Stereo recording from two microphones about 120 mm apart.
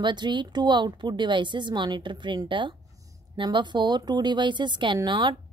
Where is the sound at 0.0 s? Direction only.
40° right (ahead or behind).